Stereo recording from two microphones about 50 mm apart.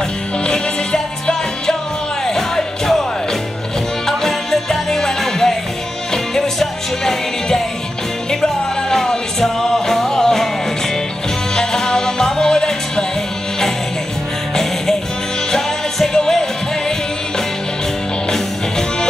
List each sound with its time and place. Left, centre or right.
0.4 s music: centre
8.9 s music: centre
11.5 s music: centre
14.5 s music: centre
18.3 s music: centre